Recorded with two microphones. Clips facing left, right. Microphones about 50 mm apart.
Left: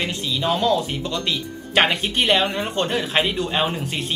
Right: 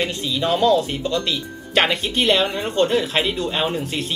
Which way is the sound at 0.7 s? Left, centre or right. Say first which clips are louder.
Right 3 dB; centre.